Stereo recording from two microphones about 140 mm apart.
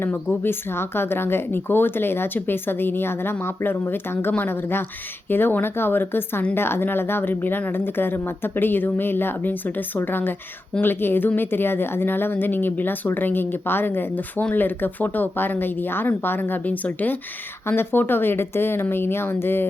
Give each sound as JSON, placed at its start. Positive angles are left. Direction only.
{"t": 0.0, "sound": "a woman's voice", "side_deg": 15}